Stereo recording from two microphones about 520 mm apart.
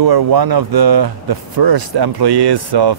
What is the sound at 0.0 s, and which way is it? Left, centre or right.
Speech, right.